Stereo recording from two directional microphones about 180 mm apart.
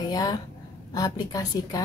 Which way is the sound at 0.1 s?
20° left (ahead or behind).